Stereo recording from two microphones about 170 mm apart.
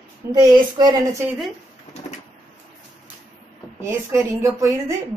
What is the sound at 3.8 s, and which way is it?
A woman's voice, 20° right (ahead or behind).